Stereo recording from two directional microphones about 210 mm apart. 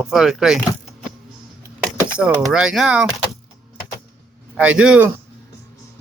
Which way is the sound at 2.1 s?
5° right (ahead or behind).